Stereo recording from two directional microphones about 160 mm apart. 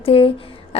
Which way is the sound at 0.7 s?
35° left (ahead or behind).